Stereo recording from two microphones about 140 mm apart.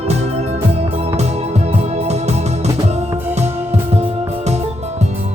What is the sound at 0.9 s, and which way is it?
Music, 50° right (ahead or behind).